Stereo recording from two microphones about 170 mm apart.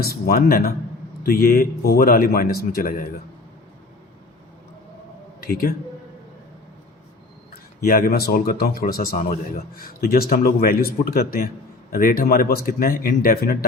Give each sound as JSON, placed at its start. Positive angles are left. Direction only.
{"t": 0.0, "sound": "speech", "side_deg": 65}
{"t": 5.4, "sound": "a man's voice", "side_deg": 60}
{"t": 7.5, "sound": "speech", "side_deg": 60}